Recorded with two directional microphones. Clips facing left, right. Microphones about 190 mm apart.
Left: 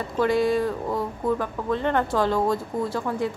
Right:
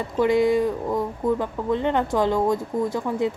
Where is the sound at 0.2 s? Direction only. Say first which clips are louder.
Right 2 dB; 20° right (ahead or behind).